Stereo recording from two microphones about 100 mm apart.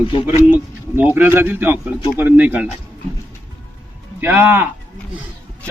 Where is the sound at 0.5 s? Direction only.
20° right (ahead or behind).